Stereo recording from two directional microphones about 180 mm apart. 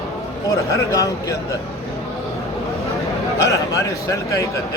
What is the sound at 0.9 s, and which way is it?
Speech, 20° left (ahead or behind).